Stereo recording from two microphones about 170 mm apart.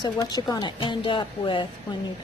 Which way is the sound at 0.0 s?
25° left (ahead or behind).